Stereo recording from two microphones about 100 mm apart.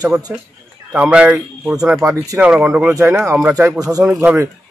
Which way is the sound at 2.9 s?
30° right (ahead or behind).